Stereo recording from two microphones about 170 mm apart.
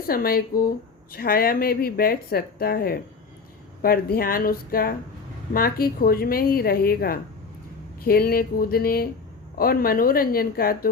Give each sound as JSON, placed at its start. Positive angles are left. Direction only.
{"t": 0.1, "sound": "speech", "side_deg": 60}